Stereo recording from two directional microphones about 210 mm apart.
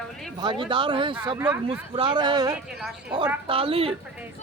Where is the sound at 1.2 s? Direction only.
10° right (ahead or behind).